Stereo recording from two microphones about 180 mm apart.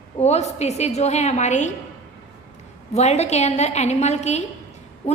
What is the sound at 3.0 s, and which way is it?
A woman's voice, 35° left (ahead or behind).